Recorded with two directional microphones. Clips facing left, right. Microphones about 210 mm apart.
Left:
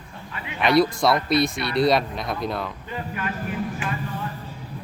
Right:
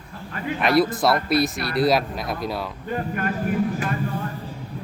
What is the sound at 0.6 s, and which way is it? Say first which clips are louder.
Speech: left 1 dB; centre (ahead or behind).